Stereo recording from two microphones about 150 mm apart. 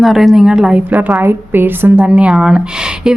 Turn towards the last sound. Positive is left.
turn(degrees=-5)  # may be behind; listen again after turning